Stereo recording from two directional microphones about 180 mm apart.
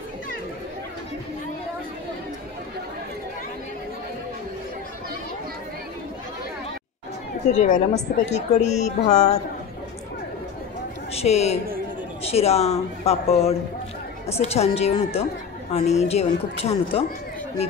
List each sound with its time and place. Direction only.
7.5 s a woman's voice: 40° left (ahead or behind)
11.1 s a woman's voice: 35° left (ahead or behind)